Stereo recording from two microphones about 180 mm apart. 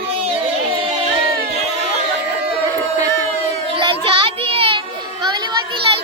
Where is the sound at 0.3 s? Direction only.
30° right (ahead or behind).